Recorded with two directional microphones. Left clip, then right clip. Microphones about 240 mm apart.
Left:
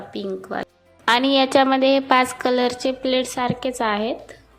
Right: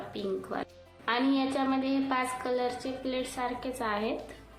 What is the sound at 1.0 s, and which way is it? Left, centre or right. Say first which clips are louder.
A woman's voice: left 12 dB; left.